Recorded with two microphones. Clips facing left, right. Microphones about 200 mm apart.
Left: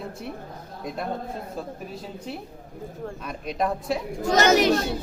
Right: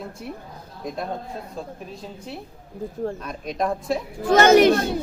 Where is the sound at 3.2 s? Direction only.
Centre (ahead or behind).